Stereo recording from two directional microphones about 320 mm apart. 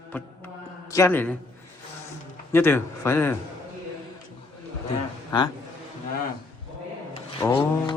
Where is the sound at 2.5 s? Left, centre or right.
Centre.